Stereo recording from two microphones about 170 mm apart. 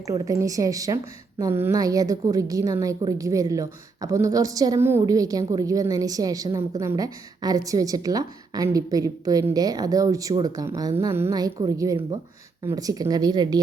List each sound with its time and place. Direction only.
0.1 s a woman's voice: 20° right (ahead or behind)